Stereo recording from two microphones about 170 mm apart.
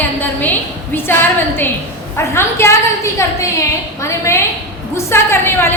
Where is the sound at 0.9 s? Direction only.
10° left (ahead or behind).